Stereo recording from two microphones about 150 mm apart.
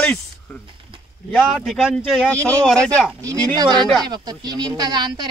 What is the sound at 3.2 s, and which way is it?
A woman's voice, 20° right (ahead or behind).